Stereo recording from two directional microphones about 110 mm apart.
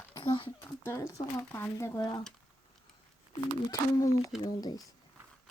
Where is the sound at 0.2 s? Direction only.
40° left (ahead or behind).